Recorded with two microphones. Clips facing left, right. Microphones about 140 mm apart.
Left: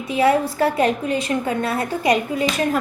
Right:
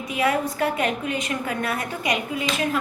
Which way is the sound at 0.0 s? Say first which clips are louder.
Left 5 dB; 30° left (ahead or behind).